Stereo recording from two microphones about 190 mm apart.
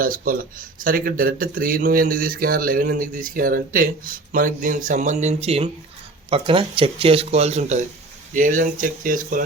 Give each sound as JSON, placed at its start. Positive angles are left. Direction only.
{"t": 0.0, "sound": "speech", "side_deg": -50}